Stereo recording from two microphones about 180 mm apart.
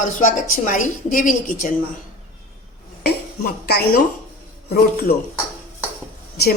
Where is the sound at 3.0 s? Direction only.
60° left (ahead or behind).